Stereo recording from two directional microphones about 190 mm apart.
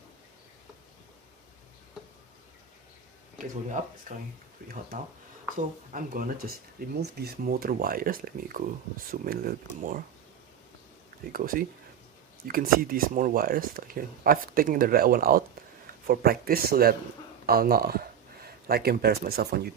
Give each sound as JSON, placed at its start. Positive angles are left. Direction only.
{"t": 3.8, "sound": "speech", "side_deg": -40}
{"t": 5.5, "sound": "speech", "side_deg": -45}
{"t": 6.7, "sound": "speech", "side_deg": -55}
{"t": 11.3, "sound": "speech", "side_deg": -50}